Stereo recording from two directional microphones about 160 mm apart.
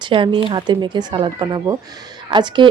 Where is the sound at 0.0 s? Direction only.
30° right (ahead or behind).